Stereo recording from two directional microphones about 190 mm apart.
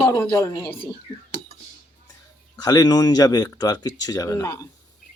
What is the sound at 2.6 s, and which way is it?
Speech, 20° left (ahead or behind).